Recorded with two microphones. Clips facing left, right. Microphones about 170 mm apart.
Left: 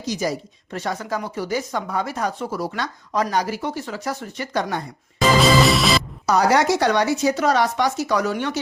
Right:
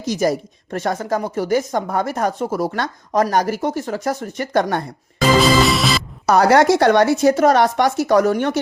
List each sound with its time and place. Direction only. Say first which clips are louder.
0.1 s speech: right 6 dB; 50° right (ahead or behind)
5.4 s music: even; centre (ahead or behind)
6.2 s speech: right 5 dB; 60° right (ahead or behind)